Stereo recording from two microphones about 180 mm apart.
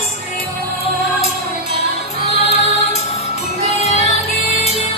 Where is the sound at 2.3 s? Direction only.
35° left (ahead or behind).